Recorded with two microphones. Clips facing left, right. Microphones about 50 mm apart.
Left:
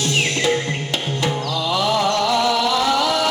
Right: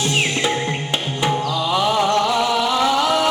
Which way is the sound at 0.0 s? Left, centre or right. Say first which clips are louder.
Even; centre.